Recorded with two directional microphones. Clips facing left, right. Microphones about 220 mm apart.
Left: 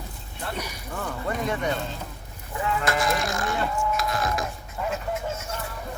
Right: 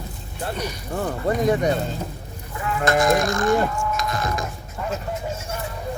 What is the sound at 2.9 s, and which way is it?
Speech, 45° right (ahead or behind).